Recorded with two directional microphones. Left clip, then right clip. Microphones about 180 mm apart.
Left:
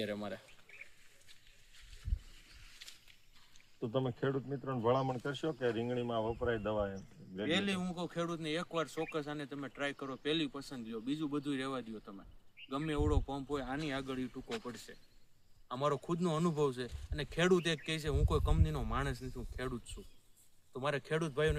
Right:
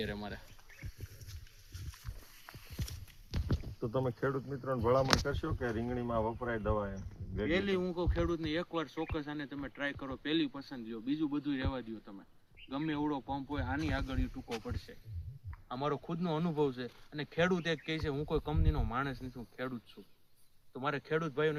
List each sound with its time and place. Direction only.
0.0 s speech: 75° left (ahead or behind)
3.8 s speech: 15° left (ahead or behind)
15.7 s speech: 25° left (ahead or behind)
20.7 s speech: 25° left (ahead or behind)